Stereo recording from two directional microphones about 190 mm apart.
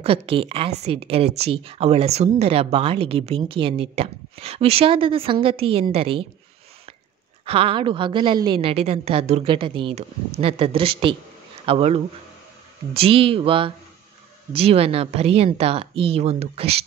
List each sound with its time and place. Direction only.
0.0 s a woman's voice: 30° right (ahead or behind)
7.4 s a woman's voice: 30° right (ahead or behind)